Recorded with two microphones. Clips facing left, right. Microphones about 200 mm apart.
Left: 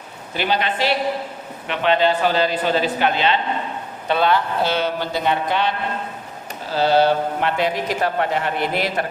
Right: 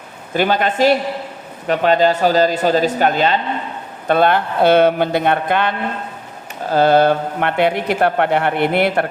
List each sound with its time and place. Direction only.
0.3 s speech: 45° right (ahead or behind)